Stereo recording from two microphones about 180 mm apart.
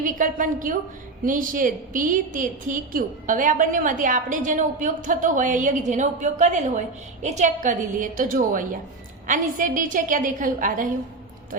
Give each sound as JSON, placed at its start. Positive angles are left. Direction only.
{"t": 0.0, "sound": "a woman's voice", "side_deg": -45}